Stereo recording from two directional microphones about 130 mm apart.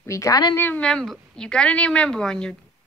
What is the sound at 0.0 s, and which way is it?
Speech, 25° left (ahead or behind).